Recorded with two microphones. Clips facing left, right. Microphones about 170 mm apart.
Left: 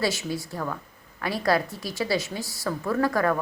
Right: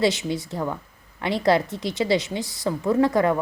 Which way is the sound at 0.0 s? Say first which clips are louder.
Right 5 dB; 20° right (ahead or behind).